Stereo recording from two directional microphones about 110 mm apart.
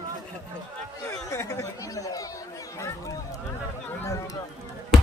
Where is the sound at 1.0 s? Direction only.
30° left (ahead or behind).